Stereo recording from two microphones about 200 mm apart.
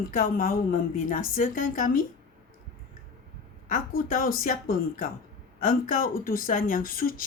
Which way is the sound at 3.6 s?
45° left (ahead or behind).